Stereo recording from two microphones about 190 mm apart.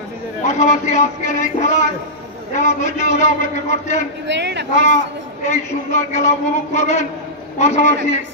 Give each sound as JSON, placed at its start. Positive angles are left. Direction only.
{"t": 0.4, "sound": "a man's voice", "side_deg": 40}
{"t": 4.3, "sound": "speech", "side_deg": -65}
{"t": 5.5, "sound": "a man's voice", "side_deg": 35}